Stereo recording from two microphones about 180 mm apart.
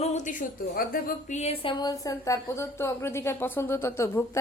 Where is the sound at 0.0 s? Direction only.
40° left (ahead or behind).